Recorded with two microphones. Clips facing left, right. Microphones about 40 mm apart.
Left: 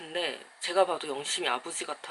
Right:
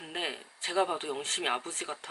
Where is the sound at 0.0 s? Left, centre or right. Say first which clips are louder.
Left 3 dB; centre.